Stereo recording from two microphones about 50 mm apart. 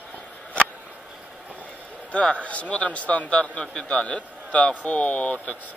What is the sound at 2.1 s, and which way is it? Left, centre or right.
A man's voice, left.